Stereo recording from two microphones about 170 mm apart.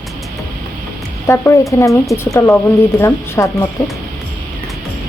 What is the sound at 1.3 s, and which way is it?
Speech, 15° left (ahead or behind).